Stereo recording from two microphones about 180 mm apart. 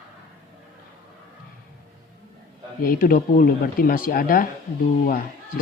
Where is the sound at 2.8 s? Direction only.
55° left (ahead or behind).